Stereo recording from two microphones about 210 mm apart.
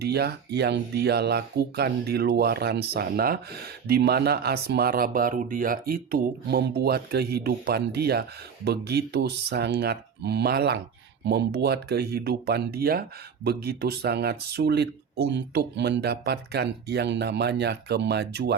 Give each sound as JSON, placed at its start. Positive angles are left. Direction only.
{"t": 0.0, "sound": "speech", "side_deg": -50}